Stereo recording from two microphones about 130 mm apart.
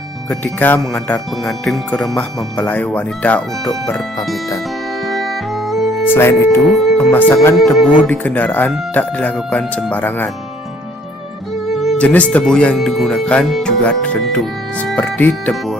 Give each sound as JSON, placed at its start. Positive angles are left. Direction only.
{"t": 0.3, "sound": "speech", "side_deg": 15}
{"t": 5.0, "sound": "music", "side_deg": 0}
{"t": 6.1, "sound": "speech", "side_deg": 20}
{"t": 6.7, "sound": "speech", "side_deg": 0}
{"t": 7.1, "sound": "speech", "side_deg": 15}
{"t": 7.5, "sound": "speech", "side_deg": 0}
{"t": 11.7, "sound": "music", "side_deg": 0}
{"t": 11.9, "sound": "speech", "side_deg": 10}